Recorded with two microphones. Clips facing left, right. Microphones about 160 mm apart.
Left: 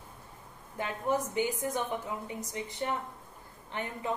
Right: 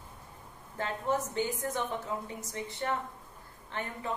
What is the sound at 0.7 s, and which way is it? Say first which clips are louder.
A woman's voice: left 1 dB; 15° left (ahead or behind).